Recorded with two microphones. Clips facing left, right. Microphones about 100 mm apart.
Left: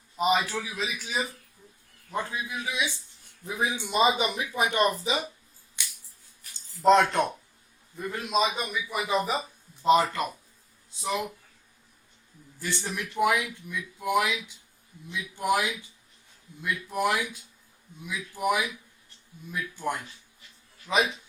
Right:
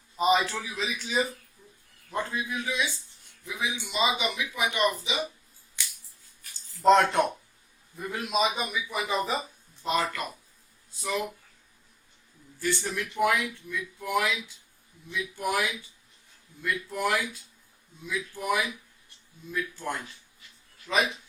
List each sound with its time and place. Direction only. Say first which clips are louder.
0.2 s a man's voice: right 1 dB; 5° left (ahead or behind)
3.4 s speech: left 3 dB; 40° left (ahead or behind)
6.8 s a man's voice: even; centre (ahead or behind)
9.8 s speech: left 6 dB; 25° left (ahead or behind)
12.5 s speech: right 3 dB; 20° left (ahead or behind)